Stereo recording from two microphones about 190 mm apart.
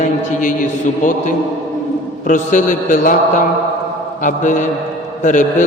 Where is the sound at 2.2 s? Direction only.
40° left (ahead or behind).